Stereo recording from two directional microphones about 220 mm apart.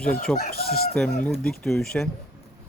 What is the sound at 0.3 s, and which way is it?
Speech, 35° left (ahead or behind).